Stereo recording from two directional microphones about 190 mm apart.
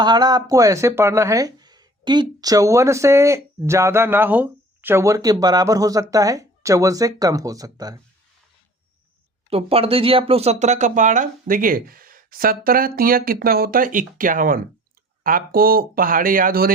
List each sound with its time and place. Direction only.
0.0 s speech: 20° right (ahead or behind)
9.5 s speech: 30° right (ahead or behind); by 16.7 s 50° right (ahead or behind)